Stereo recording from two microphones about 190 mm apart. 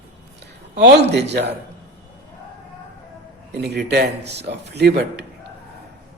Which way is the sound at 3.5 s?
60° right (ahead or behind).